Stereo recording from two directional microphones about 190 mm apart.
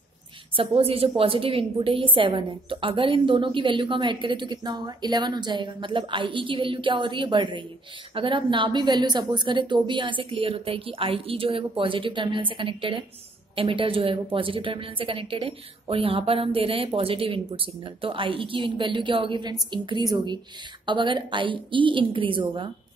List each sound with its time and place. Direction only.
0.6 s a woman's voice: 30° right (ahead or behind)